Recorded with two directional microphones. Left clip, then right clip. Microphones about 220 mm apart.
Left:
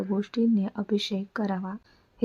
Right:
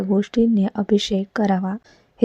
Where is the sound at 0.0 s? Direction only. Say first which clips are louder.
Right 8 dB; 20° right (ahead or behind).